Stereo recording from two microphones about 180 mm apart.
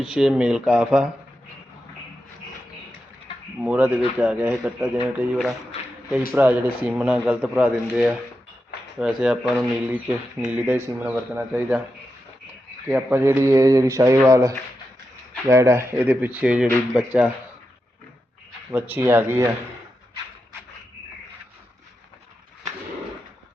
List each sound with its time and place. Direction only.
0.0 s speech: 5° right (ahead or behind)
3.6 s speech: 10° right (ahead or behind)
12.9 s speech: 10° right (ahead or behind)
18.7 s speech: 10° right (ahead or behind)